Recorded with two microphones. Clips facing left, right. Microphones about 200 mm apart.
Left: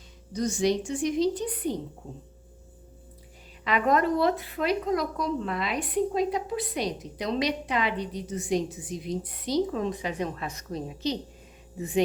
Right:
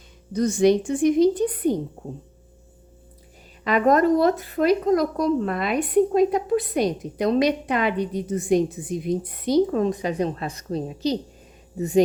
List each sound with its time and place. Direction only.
0.3 s a woman's voice: 55° right (ahead or behind)
3.6 s speech: 45° right (ahead or behind)